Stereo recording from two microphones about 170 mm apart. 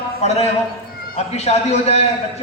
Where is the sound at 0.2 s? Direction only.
40° left (ahead or behind).